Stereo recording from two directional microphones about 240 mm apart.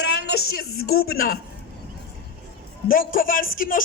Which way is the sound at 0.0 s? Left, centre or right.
Left.